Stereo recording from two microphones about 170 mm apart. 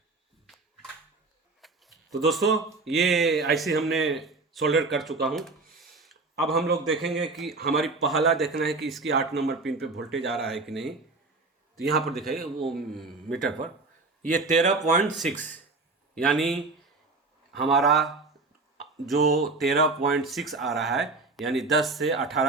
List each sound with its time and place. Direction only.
0.4 s a sound: centre (ahead or behind)
1.6 s a man's voice: centre (ahead or behind)
7.5 s speech: 65° right (ahead or behind)
7.8 s speech: centre (ahead or behind)
14.3 s speech: 45° right (ahead or behind)
15.4 s speech: 10° left (ahead or behind)